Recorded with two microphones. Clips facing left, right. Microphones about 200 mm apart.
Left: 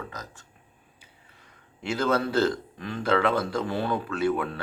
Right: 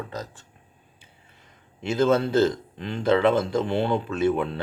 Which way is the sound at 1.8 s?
20° right (ahead or behind).